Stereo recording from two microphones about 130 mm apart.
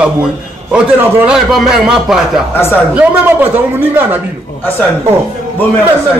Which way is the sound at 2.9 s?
15° right (ahead or behind).